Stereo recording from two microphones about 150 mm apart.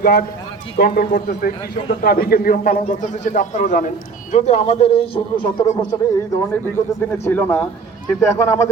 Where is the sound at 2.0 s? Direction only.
85° left.